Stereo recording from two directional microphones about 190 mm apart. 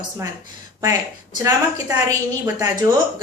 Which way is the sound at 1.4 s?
15° right (ahead or behind).